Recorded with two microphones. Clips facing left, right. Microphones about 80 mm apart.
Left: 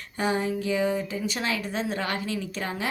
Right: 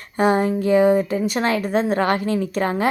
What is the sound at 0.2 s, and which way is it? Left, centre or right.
A woman's voice, right.